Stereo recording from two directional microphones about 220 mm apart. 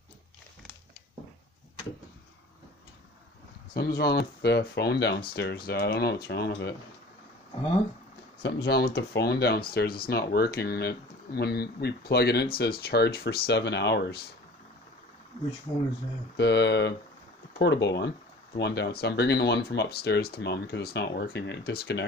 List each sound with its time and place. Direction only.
3.7 s speech: 45° left (ahead or behind)
8.4 s speech: 50° left (ahead or behind)
16.3 s speech: 50° left (ahead or behind)